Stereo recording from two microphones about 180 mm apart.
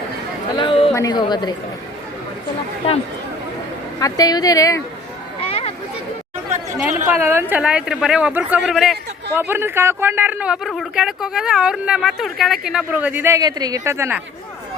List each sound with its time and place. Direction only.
0.5 s chatter: 30° left (ahead or behind)
0.9 s a woman's voice: 20° left (ahead or behind)
4.0 s a woman's voice: 20° left (ahead or behind)
5.4 s a sound: 30° left (ahead or behind)
6.9 s speech: 10° right (ahead or behind)
9.3 s speech: 10° right (ahead or behind)